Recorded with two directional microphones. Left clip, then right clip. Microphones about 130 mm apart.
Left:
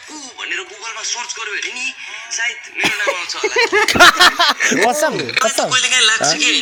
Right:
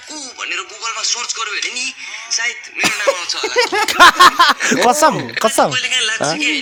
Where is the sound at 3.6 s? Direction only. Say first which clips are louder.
Left 1 dB; 50° right (ahead or behind).